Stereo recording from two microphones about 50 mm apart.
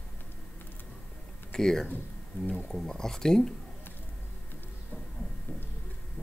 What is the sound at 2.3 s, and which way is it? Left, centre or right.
Speech, left.